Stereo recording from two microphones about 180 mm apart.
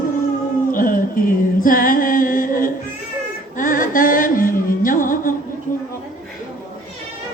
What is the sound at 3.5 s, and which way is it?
Music, 50° left (ahead or behind).